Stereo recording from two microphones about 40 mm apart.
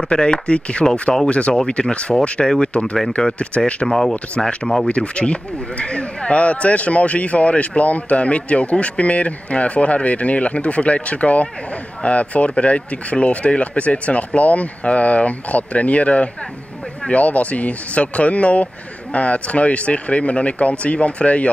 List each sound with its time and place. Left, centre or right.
0.1 s speech: left
3.8 s speech: centre
4.8 s a man's voice: left